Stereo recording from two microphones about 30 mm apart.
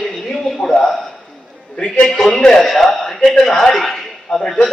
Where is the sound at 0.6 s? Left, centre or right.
Left.